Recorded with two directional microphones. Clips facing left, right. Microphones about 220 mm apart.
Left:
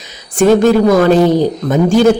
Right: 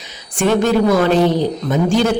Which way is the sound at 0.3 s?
40° left (ahead or behind).